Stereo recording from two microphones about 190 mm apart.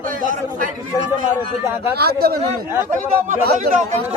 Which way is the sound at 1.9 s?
55° right (ahead or behind).